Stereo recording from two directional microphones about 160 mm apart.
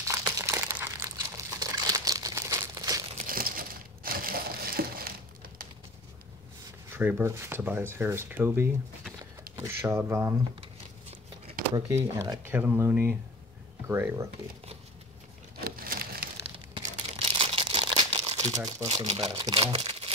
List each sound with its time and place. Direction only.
0.0 s crumpling: 20° right (ahead or behind)
3.2 s crumpling: 60° right (ahead or behind)
6.9 s speech: 10° right (ahead or behind)
10.6 s a sound: 35° right (ahead or behind)
11.7 s speech: 20° right (ahead or behind)
15.6 s a sound: 65° right (ahead or behind)
16.5 s crumpling: 35° right (ahead or behind)
18.9 s speech: 35° right (ahead or behind)